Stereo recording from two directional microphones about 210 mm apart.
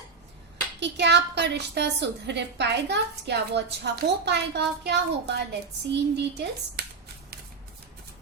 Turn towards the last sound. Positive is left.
turn(degrees=-55)  # may be behind; listen again after turning